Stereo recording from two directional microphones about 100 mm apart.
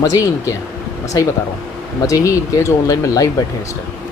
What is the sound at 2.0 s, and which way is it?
Speech, 35° left (ahead or behind).